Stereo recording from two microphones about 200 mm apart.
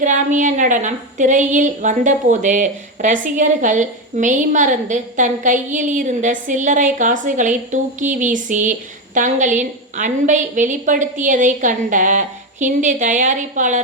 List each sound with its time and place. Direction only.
0.0 s a woman's voice: 40° right (ahead or behind)